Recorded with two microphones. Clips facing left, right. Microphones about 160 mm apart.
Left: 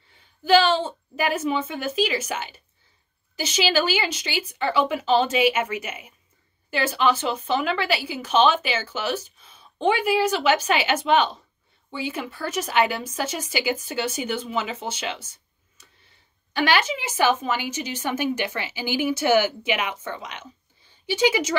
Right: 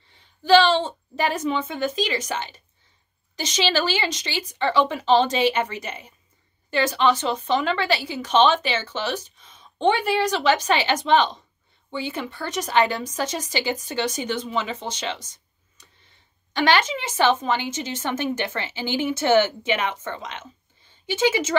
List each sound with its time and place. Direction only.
0.4 s a woman's voice: 10° left (ahead or behind)
10.9 s a woman's voice: 35° right (ahead or behind)
11.1 s a woman's voice: 10° left (ahead or behind)
16.5 s a woman's voice: 10° left (ahead or behind)